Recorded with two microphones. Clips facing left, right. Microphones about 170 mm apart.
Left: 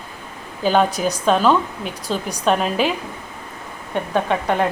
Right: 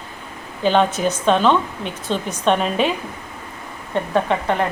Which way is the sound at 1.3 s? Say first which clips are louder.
Even; 5° left (ahead or behind).